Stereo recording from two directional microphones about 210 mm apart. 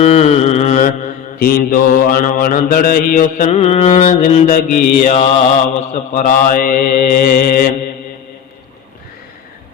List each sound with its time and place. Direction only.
0.0 s mantra: 35° left (ahead or behind)